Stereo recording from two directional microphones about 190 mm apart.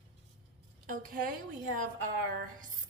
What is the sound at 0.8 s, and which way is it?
A woman's voice, 45° right (ahead or behind).